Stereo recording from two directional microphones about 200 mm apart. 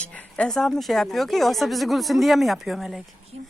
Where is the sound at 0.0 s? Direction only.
5° left (ahead or behind).